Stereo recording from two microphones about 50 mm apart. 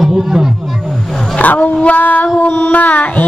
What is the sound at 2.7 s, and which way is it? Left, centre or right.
Child singing, left.